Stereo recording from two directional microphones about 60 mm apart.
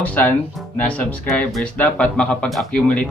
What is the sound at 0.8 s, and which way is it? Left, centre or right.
Speech, left.